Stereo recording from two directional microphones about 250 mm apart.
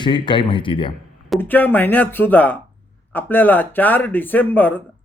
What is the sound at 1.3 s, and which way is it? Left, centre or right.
Speech, centre.